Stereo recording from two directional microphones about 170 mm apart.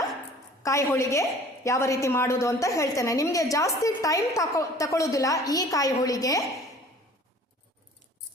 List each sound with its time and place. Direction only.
0.6 s a woman's voice: 15° left (ahead or behind)